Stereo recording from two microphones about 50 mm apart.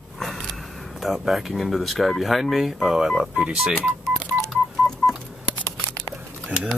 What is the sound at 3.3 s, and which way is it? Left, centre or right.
Telephone dialing, right.